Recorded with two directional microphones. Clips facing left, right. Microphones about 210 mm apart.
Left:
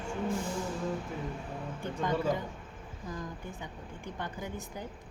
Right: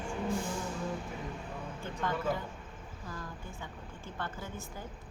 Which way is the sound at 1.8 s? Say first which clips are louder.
Left 3 dB; 15° left (ahead or behind).